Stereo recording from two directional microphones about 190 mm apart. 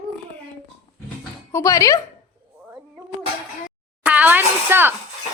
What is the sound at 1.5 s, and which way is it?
Speech, 15° left (ahead or behind).